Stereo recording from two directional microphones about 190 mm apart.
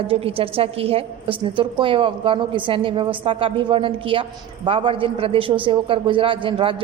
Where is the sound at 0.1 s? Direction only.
30° right (ahead or behind).